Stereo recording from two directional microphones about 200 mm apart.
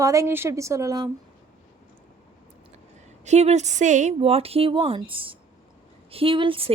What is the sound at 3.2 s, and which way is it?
A woman's voice, 35° right (ahead or behind).